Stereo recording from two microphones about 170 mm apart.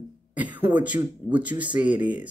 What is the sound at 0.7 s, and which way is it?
Speech, 10° right (ahead or behind).